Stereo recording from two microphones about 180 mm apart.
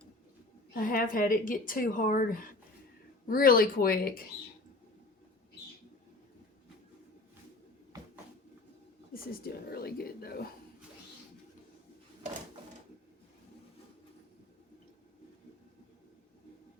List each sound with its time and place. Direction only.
0.7 s a woman's voice: 50° left (ahead or behind)
9.1 s speech: 60° left (ahead or behind)